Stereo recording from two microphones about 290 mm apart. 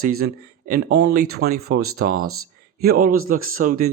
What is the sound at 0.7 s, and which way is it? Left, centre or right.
Speech, right.